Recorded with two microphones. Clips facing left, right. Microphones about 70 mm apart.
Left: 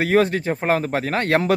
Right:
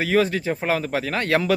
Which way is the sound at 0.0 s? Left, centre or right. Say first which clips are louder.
Left 2 dB; left.